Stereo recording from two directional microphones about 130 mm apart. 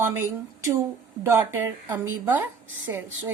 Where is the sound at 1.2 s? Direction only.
20° right (ahead or behind).